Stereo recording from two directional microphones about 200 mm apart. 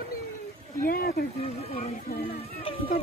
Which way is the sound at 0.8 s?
45° left (ahead or behind).